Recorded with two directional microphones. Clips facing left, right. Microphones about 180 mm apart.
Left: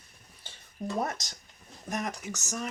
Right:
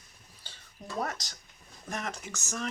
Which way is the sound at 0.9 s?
20° left (ahead or behind).